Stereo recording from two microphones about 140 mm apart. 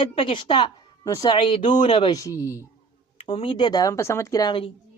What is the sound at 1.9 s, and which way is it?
Speech, 30° left (ahead or behind).